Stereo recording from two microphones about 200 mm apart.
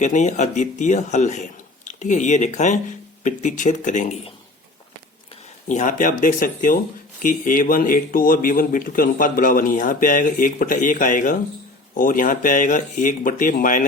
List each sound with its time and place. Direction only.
0.0 s a man's voice: 35° left (ahead or behind)
5.6 s a man's voice: 40° left (ahead or behind)